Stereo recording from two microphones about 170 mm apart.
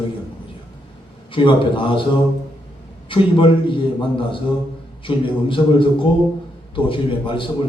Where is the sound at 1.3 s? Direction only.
30° left (ahead or behind).